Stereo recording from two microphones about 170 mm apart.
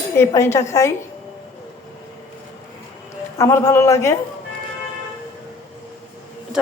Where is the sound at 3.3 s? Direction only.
20° left (ahead or behind).